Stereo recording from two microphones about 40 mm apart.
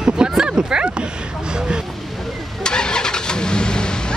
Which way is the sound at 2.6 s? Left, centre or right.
Centre.